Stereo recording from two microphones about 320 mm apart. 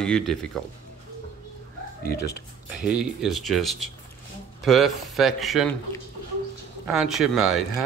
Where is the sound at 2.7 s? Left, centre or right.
Centre.